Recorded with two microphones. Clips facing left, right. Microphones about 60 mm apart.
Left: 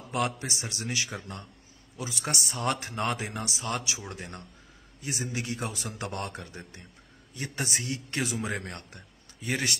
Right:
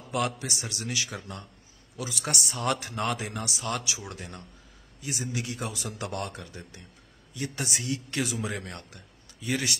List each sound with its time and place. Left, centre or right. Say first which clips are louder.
0.7 s a man's voice: left 1 dB; left